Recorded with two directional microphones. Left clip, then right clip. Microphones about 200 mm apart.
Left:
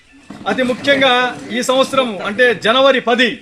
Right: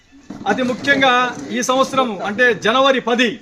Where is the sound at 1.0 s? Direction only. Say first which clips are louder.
Left 1 dB; 10° right (ahead or behind).